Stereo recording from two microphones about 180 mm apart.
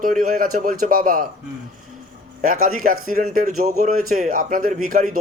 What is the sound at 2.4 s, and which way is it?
Speech, 50° right (ahead or behind).